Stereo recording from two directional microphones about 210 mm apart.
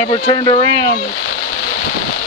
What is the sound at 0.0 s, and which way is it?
Speech, 25° left (ahead or behind).